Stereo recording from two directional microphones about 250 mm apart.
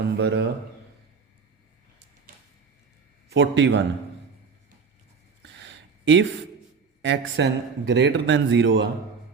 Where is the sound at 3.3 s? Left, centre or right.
Right.